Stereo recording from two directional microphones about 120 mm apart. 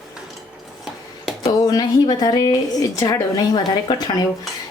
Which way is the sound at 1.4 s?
35° left (ahead or behind).